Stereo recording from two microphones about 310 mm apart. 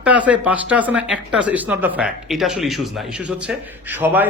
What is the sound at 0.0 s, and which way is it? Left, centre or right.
A man's voice, centre.